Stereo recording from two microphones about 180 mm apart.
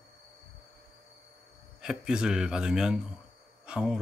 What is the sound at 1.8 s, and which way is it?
Speech, 5° right (ahead or behind).